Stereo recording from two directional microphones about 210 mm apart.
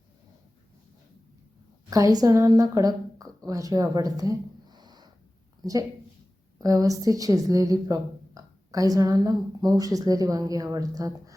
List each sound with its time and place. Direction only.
1.9 s a woman's voice: 15° right (ahead or behind)